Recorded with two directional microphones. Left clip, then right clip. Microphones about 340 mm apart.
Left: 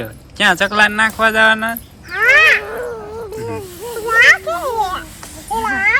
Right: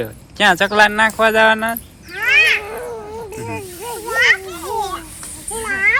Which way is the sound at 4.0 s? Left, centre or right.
Centre.